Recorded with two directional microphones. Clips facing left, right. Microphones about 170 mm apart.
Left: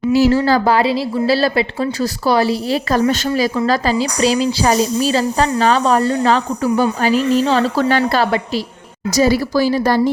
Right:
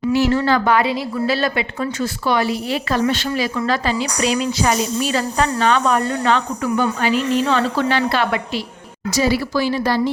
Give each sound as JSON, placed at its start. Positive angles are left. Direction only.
{"t": 0.1, "sound": "a woman's voice", "side_deg": 35}